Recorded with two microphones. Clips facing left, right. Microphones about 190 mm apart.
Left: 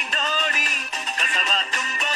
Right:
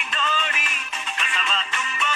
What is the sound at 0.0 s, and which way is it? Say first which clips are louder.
Music: even; 40° left (ahead or behind).